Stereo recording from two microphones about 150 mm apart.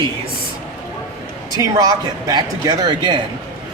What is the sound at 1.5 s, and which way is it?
Speech, 25° right (ahead or behind).